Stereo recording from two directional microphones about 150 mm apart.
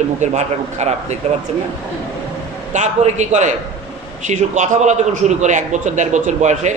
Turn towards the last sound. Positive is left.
turn(degrees=-55)  # may be behind; listen again after turning